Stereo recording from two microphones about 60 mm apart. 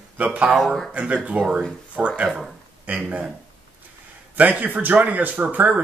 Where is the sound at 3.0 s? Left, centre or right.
Right.